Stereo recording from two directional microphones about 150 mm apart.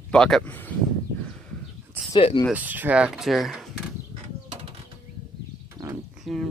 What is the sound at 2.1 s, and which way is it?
Speech, 40° left (ahead or behind).